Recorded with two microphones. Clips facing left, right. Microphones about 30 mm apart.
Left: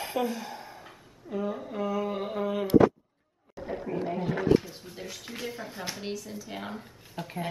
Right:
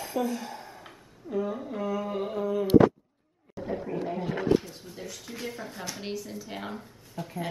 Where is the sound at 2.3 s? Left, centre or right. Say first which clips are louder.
Right 2 dB; left.